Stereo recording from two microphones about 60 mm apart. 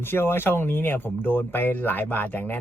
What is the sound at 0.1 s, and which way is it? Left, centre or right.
Speech, left.